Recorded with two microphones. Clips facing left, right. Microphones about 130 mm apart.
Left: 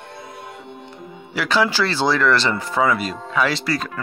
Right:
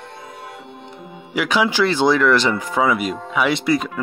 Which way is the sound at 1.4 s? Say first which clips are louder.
Right 2 dB; 15° right (ahead or behind).